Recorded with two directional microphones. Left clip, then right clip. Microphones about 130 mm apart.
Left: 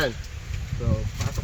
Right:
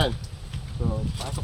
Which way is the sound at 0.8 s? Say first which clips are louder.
Left 1 dB; 20° right (ahead or behind).